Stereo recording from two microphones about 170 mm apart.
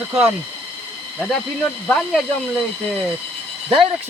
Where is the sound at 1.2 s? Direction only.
5° left (ahead or behind).